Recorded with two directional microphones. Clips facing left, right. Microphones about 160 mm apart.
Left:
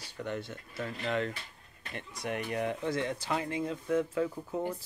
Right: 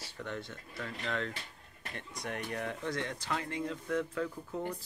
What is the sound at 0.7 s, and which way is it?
Speech, 20° left (ahead or behind).